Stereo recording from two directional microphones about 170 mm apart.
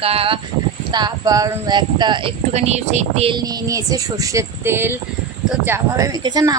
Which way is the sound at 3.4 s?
20° right (ahead or behind).